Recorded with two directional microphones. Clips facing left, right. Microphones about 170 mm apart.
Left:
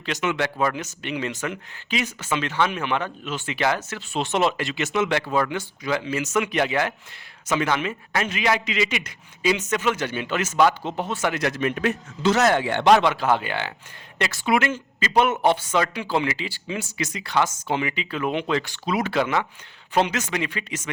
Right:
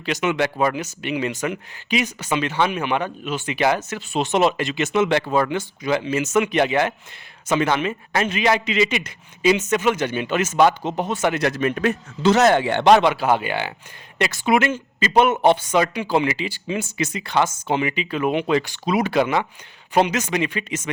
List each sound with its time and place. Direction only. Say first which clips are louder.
0.0 s a man's voice: right 4 dB; 15° right (ahead or behind)
11.4 s a man's voice: right 3 dB; 40° right (ahead or behind)
12.2 s a man's voice: right 4 dB; 25° right (ahead or behind)